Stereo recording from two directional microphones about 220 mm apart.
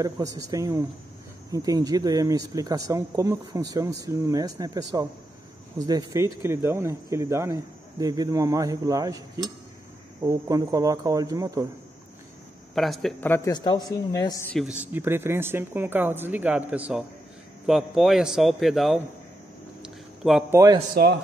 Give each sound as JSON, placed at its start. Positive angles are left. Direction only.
{"t": 0.0, "sound": "speech", "side_deg": -15}
{"t": 12.7, "sound": "a man's voice", "side_deg": 0}
{"t": 14.5, "sound": "a man's voice", "side_deg": 0}
{"t": 19.8, "sound": "a sound", "side_deg": -5}
{"t": 20.9, "sound": "a man's voice", "side_deg": -50}